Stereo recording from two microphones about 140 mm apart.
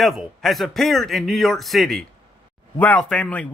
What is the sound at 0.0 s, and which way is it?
A man's voice, centre (ahead or behind).